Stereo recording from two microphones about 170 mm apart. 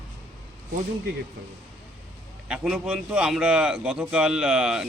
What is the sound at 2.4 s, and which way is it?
A man's voice, 5° right (ahead or behind).